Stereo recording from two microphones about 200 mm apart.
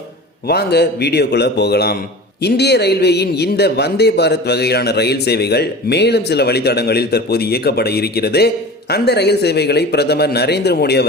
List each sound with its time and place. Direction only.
0.4 s speech: 55° left (ahead or behind)